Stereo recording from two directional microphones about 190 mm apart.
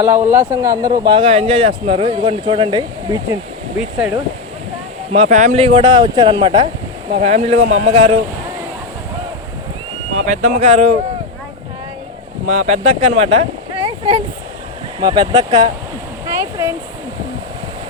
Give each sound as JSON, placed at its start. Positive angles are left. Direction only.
{"t": 0.0, "sound": "speech", "side_deg": -10}
{"t": 3.8, "sound": "speech", "side_deg": -5}
{"t": 5.1, "sound": "speech", "side_deg": -35}
{"t": 7.1, "sound": "speech", "side_deg": -35}
{"t": 10.3, "sound": "speech", "side_deg": -35}
{"t": 12.5, "sound": "speech", "side_deg": -35}
{"t": 16.2, "sound": "a sound", "side_deg": -15}